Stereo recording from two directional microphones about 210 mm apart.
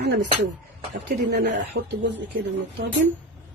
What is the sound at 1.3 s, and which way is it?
Speech, 55° right (ahead or behind).